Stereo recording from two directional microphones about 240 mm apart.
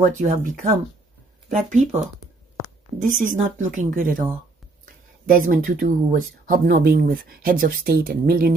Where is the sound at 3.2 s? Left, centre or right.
Right.